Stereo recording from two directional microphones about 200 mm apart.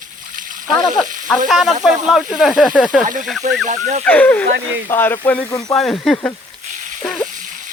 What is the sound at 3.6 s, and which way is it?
Speech, 35° right (ahead or behind).